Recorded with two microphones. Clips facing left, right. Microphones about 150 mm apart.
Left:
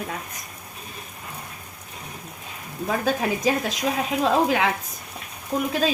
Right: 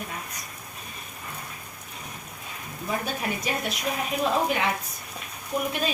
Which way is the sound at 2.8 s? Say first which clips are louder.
Left 6 dB; 90° left.